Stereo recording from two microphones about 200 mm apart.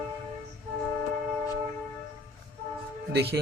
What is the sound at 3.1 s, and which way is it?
Speech, 55° right (ahead or behind).